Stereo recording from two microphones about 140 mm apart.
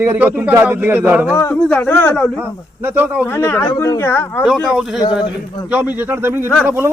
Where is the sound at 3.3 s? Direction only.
20° left (ahead or behind).